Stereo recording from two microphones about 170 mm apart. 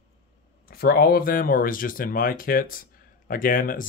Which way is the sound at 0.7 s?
60° left (ahead or behind).